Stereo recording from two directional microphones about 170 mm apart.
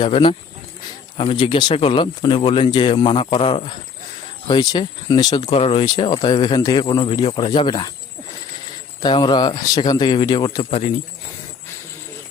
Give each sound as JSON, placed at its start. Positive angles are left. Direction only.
{"t": 0.0, "sound": "speech", "side_deg": 30}
{"t": 9.0, "sound": "speech", "side_deg": 25}